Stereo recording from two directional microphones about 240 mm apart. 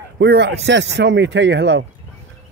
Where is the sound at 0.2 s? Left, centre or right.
Right.